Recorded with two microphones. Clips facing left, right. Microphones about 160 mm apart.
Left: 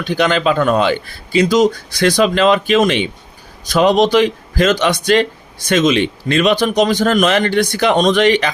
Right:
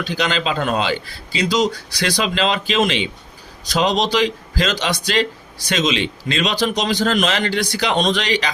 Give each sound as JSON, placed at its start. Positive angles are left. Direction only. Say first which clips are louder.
{"t": 0.0, "sound": "speech", "louder": "left 6 dB", "side_deg": 50}